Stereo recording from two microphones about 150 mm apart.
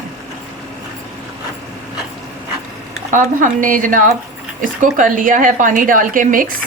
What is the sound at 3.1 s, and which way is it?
Speech, 60° right (ahead or behind).